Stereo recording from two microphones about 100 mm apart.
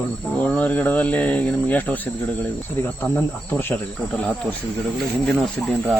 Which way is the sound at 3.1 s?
20° left (ahead or behind).